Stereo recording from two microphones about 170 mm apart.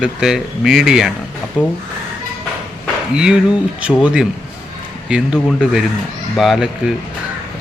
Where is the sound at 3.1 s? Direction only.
5° right (ahead or behind).